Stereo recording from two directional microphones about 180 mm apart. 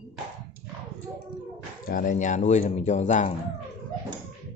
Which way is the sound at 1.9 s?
50° left (ahead or behind).